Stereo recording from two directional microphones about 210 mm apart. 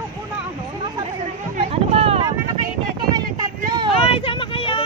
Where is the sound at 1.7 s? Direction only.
30° right (ahead or behind).